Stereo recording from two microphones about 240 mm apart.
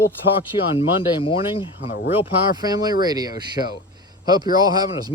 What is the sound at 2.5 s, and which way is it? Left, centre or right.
A man's voice, centre.